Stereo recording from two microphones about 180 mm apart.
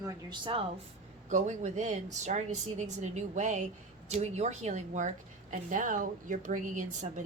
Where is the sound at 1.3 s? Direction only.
40° right (ahead or behind).